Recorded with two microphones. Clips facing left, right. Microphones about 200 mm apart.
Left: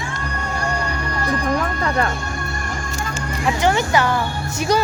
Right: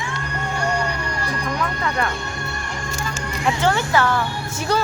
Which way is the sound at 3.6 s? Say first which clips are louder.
Left 2 dB; 15° left (ahead or behind).